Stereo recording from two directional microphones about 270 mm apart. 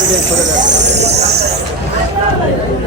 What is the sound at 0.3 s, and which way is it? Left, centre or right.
Vehicle, right.